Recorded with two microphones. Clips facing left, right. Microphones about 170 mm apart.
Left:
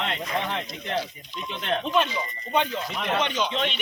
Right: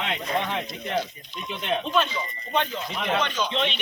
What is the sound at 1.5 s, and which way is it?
Speech, 5° right (ahead or behind).